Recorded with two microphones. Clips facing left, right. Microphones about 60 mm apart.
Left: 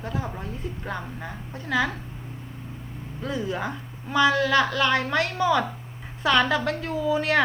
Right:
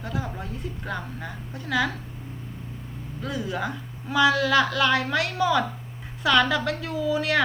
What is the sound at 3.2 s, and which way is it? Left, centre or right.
Speech, left.